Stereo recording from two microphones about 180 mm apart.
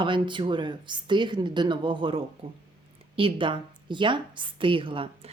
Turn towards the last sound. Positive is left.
turn(degrees=-30)  # may be behind; listen again after turning